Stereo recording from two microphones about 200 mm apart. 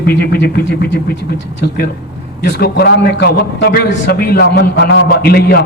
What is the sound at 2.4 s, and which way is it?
A man's voice, 55° left (ahead or behind).